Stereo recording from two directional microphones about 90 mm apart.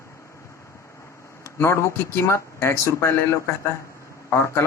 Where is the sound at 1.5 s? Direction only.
30° left (ahead or behind).